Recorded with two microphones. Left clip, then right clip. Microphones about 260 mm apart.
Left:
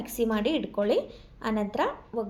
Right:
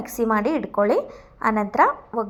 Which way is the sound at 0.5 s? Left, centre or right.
Centre.